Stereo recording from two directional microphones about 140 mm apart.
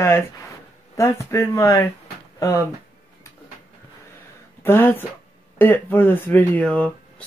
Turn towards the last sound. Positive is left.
turn(degrees=10)  # may be behind; listen again after turning